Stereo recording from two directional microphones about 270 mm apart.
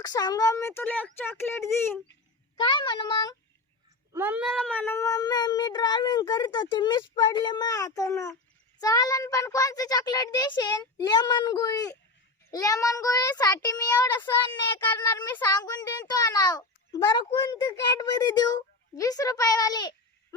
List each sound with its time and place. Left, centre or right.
0.0 s a child's voice: centre
4.1 s a child's voice: centre